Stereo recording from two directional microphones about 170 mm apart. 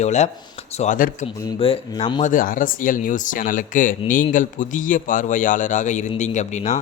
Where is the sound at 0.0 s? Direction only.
40° left (ahead or behind).